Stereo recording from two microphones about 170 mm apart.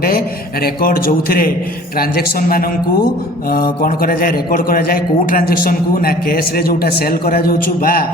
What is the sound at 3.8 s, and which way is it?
A man's voice, 55° left (ahead or behind).